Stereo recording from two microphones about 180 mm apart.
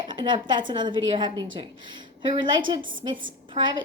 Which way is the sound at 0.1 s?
25° right (ahead or behind).